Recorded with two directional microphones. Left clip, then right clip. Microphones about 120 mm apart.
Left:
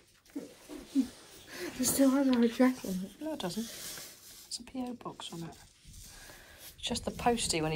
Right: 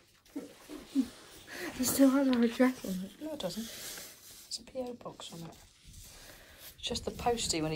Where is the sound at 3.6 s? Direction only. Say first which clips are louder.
Left 1 dB; 60° left (ahead or behind).